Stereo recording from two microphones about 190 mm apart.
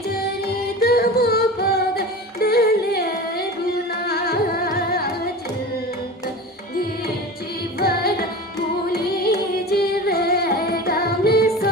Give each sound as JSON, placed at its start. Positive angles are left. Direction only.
{"t": 0.9, "sound": "music", "side_deg": 55}
{"t": 7.8, "sound": "carnatic music", "side_deg": 55}
{"t": 8.9, "sound": "music", "side_deg": 55}